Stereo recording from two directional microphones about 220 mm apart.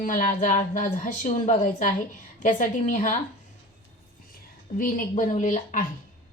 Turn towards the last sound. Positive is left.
turn(degrees=35)  # may be behind; listen again after turning